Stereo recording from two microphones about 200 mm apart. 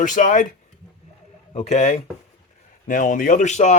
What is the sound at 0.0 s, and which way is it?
Speech, 40° left (ahead or behind).